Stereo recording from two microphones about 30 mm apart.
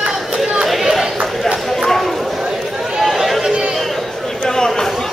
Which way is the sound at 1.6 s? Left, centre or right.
Centre.